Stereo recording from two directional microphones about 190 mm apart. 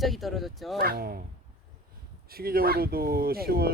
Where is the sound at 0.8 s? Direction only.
50° right (ahead or behind).